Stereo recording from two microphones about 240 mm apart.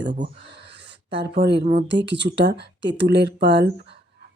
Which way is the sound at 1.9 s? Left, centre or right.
Right.